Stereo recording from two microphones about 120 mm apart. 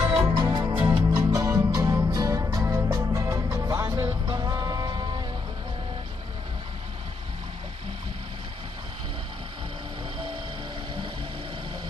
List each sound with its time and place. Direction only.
0.1 s music: 40° right (ahead or behind)
1.1 s music: 25° right (ahead or behind)
4.3 s vehicle: 35° right (ahead or behind)